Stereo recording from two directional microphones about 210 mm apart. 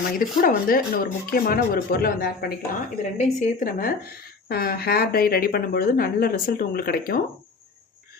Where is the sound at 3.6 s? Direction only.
45° left (ahead or behind).